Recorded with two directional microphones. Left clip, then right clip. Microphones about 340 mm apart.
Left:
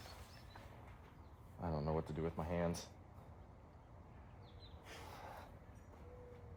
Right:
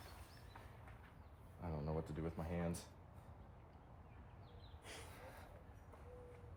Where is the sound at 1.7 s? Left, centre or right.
Left.